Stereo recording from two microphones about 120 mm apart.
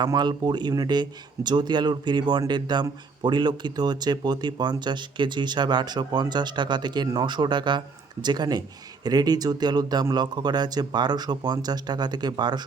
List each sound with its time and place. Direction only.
0.0 s speech: 35° right (ahead or behind)